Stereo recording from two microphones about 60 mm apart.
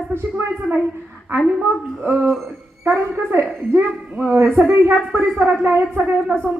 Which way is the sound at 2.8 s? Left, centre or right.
Right.